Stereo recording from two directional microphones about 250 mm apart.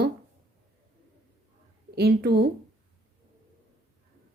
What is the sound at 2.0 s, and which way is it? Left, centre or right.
Speech, right.